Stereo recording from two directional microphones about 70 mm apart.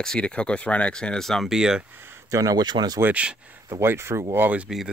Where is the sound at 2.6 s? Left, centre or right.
Right.